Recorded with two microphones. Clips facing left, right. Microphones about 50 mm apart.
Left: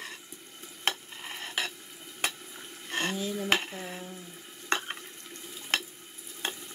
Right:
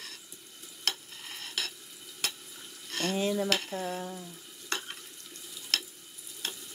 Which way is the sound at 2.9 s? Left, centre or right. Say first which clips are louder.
Left 1 dB; left.